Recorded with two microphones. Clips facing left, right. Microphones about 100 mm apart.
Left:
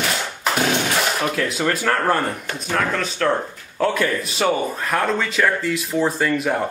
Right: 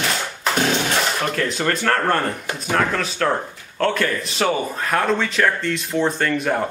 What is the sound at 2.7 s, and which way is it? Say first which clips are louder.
Speech: right 1 dB; 5° right (ahead or behind).